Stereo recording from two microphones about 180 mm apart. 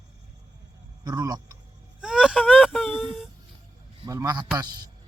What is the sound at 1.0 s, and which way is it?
Speech, 20° right (ahead or behind).